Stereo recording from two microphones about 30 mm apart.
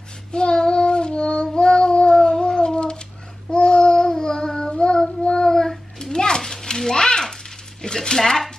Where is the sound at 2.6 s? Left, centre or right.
Left.